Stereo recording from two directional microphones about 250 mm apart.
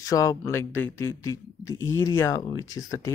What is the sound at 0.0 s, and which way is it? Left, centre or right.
Speech, centre.